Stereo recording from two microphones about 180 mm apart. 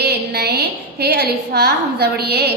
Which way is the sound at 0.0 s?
65° right (ahead or behind).